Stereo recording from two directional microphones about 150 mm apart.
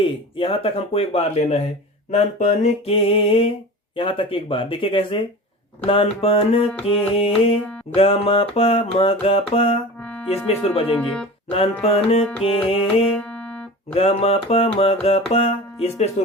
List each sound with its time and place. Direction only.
0.0 s speech: 35° left (ahead or behind)
3.9 s music: 35° left (ahead or behind)
10.0 s music: 10° left (ahead or behind)
10.2 s speech: 40° left (ahead or behind)
10.9 s speech: 10° left (ahead or behind)
11.8 s music: 40° left (ahead or behind)
13.1 s music: 10° left (ahead or behind)
13.9 s music: 40° left (ahead or behind)